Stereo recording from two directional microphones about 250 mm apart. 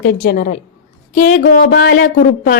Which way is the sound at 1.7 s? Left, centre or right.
Left.